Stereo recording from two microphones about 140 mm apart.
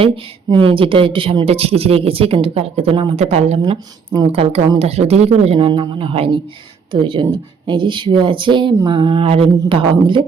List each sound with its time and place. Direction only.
0.5 s speech: 40° right (ahead or behind)
3.7 s speech: 30° right (ahead or behind)
4.3 s speech: 45° right (ahead or behind)